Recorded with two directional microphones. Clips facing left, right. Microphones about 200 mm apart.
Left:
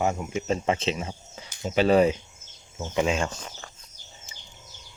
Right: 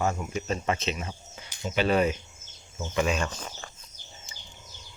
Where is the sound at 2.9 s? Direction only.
20° left (ahead or behind).